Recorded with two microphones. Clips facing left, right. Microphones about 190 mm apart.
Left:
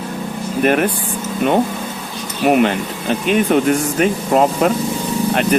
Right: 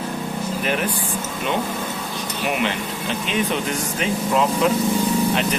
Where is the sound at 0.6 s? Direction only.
55° left (ahead or behind).